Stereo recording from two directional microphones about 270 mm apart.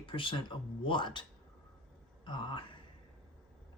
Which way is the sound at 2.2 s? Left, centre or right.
Centre.